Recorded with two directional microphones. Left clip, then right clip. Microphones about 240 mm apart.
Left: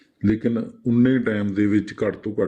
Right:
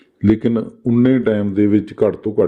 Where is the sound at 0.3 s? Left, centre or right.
Right.